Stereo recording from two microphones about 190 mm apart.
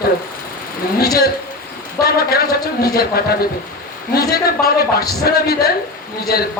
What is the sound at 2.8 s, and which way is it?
A man's voice, 55° left (ahead or behind).